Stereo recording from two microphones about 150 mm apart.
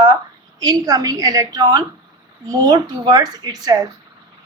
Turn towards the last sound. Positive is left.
turn(degrees=-25)  # may be behind; listen again after turning